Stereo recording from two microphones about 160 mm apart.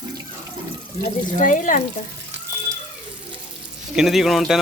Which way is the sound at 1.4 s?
55° left (ahead or behind).